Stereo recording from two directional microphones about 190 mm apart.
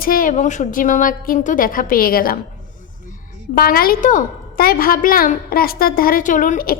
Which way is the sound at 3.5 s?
50° left (ahead or behind).